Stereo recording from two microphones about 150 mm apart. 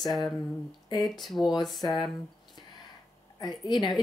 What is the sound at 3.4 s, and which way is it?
Speech, 30° left (ahead or behind).